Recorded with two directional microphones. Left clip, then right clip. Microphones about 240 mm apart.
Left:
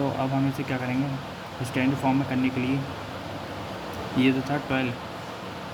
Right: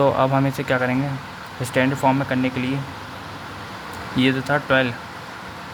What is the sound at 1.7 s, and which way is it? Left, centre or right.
Speech, right.